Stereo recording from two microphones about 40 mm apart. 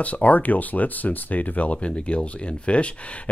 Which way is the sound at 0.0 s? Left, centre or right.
Left.